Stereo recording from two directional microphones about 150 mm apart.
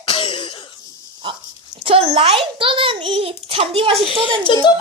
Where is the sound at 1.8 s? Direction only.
40° right (ahead or behind).